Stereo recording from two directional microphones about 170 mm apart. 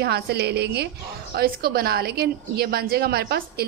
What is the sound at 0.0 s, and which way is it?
Speech, 75° right (ahead or behind).